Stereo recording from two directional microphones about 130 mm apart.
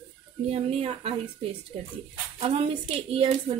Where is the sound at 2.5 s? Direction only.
45° right (ahead or behind).